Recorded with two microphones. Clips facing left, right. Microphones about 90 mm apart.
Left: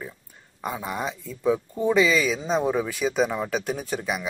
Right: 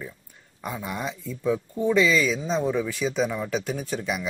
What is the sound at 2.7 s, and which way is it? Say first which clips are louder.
Speech: left 2 dB; 5° left (ahead or behind).